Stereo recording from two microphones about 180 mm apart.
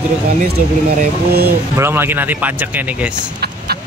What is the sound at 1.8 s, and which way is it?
Speech, 10° right (ahead or behind).